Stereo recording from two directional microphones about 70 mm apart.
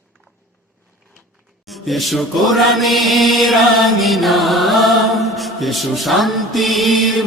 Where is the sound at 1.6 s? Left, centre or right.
Centre.